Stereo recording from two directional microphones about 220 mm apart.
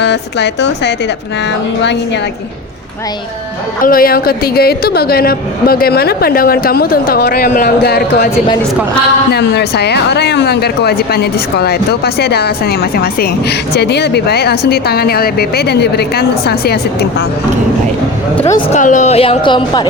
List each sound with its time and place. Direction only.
0.0 s speech: 50° left (ahead or behind)
3.8 s speech: 40° left (ahead or behind)
9.3 s speech: 50° left (ahead or behind)
18.5 s a woman's voice: 35° left (ahead or behind); by 19.9 s 20° left (ahead or behind)